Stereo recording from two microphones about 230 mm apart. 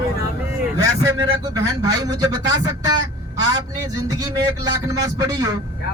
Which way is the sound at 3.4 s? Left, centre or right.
Centre.